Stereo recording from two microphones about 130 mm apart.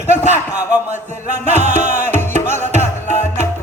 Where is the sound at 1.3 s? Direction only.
70° right (ahead or behind).